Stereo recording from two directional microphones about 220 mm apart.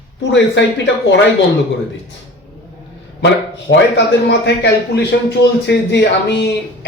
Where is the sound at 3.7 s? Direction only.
55° left (ahead or behind).